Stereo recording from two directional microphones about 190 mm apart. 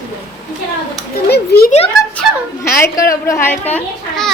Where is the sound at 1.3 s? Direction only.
55° left (ahead or behind).